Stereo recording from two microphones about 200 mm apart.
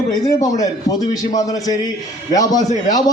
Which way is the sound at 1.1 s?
20° left (ahead or behind).